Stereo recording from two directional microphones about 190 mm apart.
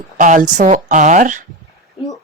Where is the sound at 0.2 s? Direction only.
45° right (ahead or behind).